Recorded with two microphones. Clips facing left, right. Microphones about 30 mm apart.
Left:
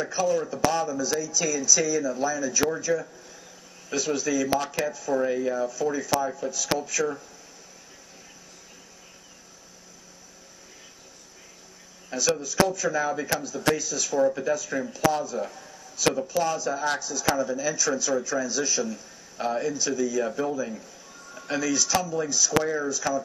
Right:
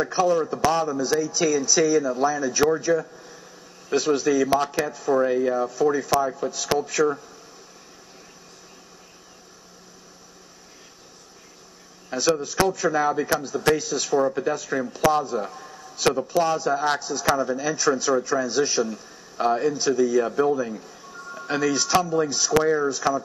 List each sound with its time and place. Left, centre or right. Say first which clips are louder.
0.0 s a man's voice: right 4 dB; right
0.8 s speech: right 4 dB; right
5.2 s speech: right 3 dB; centre
5.6 s speech: right 5 dB; right
12.1 s a man's voice: right 4 dB; right
13.1 s a man's voice: right 4 dB; right
13.4 s a man's voice: right 4 dB; right
20.2 s speech: right 6 dB; centre
21.4 s speech: right 3 dB; right